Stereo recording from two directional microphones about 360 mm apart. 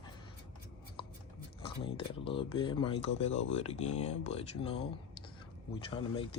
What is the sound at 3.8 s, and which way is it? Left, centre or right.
Speech, centre.